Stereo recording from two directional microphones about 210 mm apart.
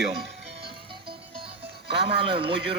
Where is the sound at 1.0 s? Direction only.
25° right (ahead or behind).